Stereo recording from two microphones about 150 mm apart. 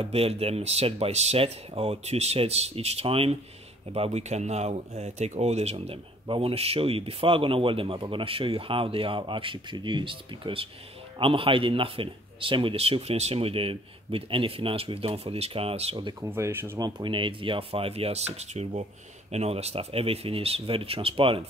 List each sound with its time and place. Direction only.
0.0 s speech: 40° right (ahead or behind)
16.3 s speech: 15° right (ahead or behind)
16.8 s speech: 30° right (ahead or behind)